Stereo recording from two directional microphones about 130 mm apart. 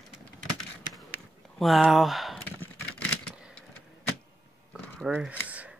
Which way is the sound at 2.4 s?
15° left (ahead or behind).